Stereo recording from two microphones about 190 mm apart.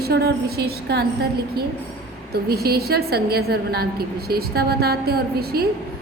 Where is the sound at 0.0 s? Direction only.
60° right (ahead or behind).